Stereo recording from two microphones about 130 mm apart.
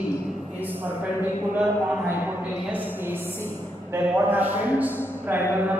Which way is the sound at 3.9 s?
15° right (ahead or behind).